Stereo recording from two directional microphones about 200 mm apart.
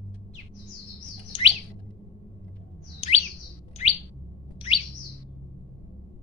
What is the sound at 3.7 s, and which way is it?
Bird, 30° left (ahead or behind).